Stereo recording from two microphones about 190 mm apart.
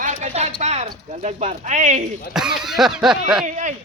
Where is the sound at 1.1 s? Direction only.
35° right (ahead or behind).